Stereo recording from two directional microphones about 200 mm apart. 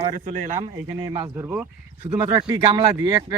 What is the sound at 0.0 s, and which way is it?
Speech, 35° right (ahead or behind).